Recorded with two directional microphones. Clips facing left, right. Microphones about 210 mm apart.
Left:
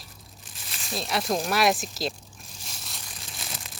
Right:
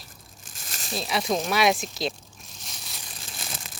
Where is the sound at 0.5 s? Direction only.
45° right (ahead or behind).